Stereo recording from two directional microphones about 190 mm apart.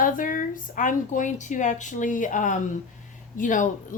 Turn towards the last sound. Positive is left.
turn(degrees=45)  # may be behind; listen again after turning